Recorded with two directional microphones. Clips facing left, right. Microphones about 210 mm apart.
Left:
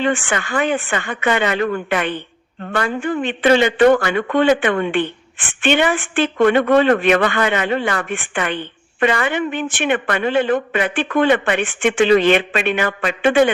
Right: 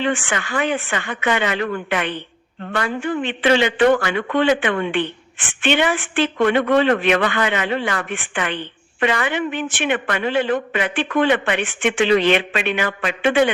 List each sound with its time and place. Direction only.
0.0 s a woman's voice: 55° left (ahead or behind)